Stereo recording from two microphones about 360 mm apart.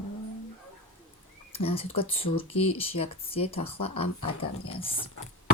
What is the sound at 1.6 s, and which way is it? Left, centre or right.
Speech, centre.